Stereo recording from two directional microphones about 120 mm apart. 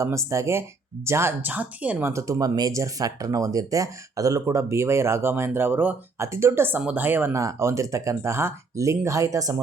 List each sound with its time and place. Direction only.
0.0 s speech: 25° right (ahead or behind)